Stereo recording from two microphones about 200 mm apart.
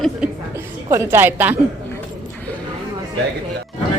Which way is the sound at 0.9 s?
10° right (ahead or behind).